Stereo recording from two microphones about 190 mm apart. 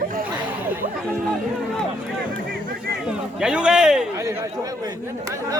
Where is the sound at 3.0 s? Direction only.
5° right (ahead or behind).